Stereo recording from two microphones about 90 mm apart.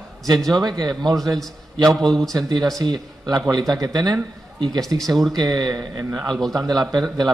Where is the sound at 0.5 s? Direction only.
45° right (ahead or behind).